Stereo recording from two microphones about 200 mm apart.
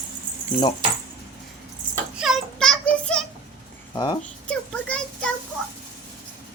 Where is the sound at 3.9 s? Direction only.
20° left (ahead or behind).